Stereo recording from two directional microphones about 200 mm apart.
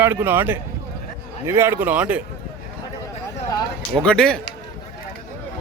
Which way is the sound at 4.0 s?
5° left (ahead or behind).